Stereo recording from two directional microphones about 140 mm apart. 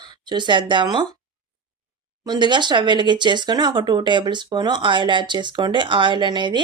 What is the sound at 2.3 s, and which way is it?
Speech, 35° right (ahead or behind).